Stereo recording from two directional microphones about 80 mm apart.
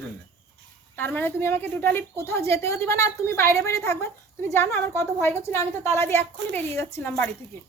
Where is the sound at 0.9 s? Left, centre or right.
Left.